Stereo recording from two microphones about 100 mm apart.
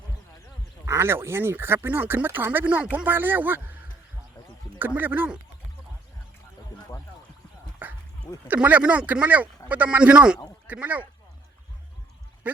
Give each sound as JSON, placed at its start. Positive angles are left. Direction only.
{"t": 0.9, "sound": "speech", "side_deg": -25}
{"t": 4.9, "sound": "speech", "side_deg": -20}
{"t": 7.8, "sound": "a sound", "side_deg": -20}
{"t": 8.4, "sound": "speech", "side_deg": -15}